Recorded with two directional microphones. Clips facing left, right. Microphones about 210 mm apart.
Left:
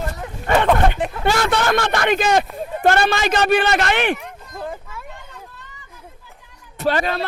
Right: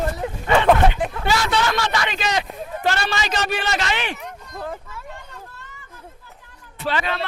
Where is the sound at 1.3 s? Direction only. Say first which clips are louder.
Left 4 dB; 55° left (ahead or behind).